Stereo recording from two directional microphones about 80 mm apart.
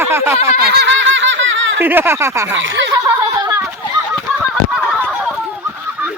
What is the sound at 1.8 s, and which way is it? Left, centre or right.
Speech, right.